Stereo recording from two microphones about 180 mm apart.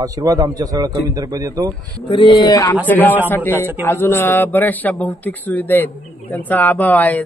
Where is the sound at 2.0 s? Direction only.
25° left (ahead or behind).